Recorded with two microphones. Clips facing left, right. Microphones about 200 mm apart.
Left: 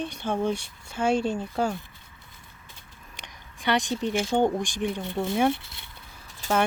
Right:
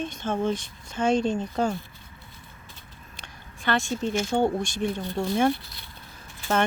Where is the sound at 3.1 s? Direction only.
15° left (ahead or behind).